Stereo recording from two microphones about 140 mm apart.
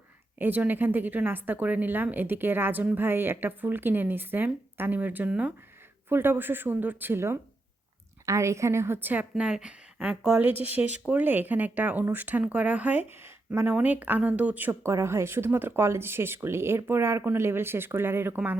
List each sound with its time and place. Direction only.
0.3 s a woman's voice: 15° right (ahead or behind)